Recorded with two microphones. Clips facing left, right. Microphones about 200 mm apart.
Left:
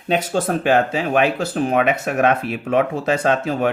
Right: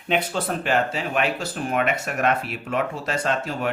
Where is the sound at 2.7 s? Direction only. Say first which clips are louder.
Left 8 dB; 60° left (ahead or behind).